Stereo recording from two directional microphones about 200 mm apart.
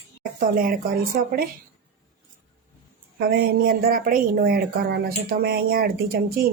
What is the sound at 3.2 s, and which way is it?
Speech, 50° right (ahead or behind).